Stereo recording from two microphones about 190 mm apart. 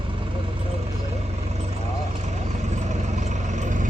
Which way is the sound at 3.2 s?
40° right (ahead or behind).